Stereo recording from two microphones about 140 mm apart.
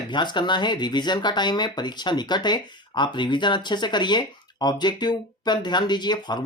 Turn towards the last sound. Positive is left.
turn(degrees=30)  # may be behind; listen again after turning